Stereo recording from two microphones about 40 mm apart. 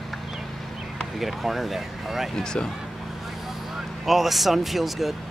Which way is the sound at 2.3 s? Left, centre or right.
Centre.